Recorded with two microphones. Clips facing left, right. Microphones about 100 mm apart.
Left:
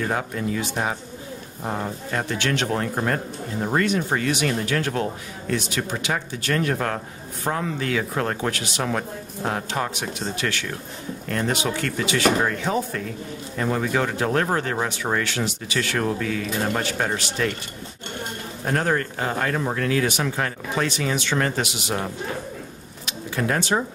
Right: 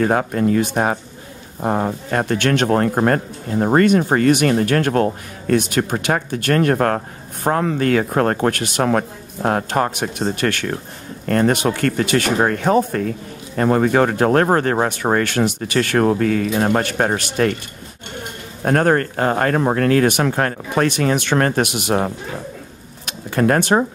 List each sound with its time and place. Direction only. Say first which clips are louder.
0.0 s speech: right 8 dB; 50° right (ahead or behind)
18.6 s speech: right 7 dB; 55° right (ahead or behind)
23.0 s bird: right 8 dB; 55° right (ahead or behind)